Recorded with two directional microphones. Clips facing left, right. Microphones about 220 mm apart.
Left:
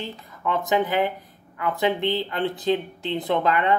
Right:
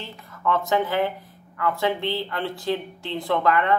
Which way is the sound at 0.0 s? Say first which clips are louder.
Right 1 dB; 15° left (ahead or behind).